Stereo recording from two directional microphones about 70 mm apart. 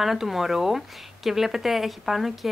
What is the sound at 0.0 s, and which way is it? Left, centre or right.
Speech, centre.